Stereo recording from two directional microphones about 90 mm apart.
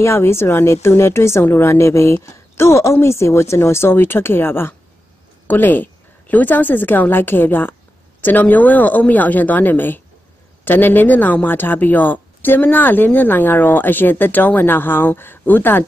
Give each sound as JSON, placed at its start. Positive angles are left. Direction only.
{"t": 0.0, "sound": "a woman's voice", "side_deg": 30}